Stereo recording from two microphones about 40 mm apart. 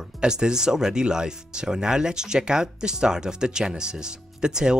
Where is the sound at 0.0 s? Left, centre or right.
Centre.